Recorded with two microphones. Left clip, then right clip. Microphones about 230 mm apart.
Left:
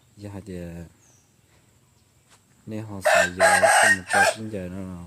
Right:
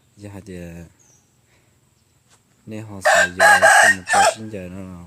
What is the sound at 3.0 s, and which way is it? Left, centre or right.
Chicken, right.